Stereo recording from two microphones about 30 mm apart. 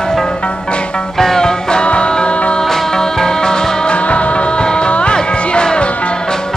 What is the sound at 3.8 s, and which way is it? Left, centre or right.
Music, left.